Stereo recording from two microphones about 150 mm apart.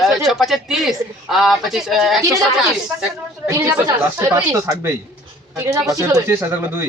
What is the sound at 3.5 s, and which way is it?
Speech, 20° right (ahead or behind).